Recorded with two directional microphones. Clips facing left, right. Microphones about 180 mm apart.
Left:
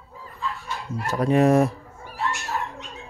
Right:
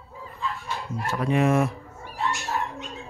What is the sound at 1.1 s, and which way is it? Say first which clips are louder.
Speech: left 4 dB; 40° left (ahead or behind).